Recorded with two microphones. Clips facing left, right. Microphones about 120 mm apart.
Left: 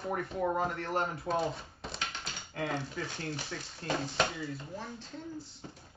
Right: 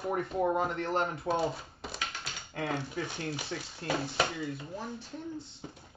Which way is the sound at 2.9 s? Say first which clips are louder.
Right 2 dB; 15° right (ahead or behind).